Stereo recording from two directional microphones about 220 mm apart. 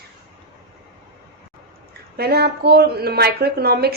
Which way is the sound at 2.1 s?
45° right (ahead or behind).